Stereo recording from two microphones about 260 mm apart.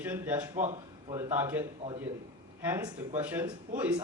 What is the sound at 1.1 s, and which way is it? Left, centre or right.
Speech, centre.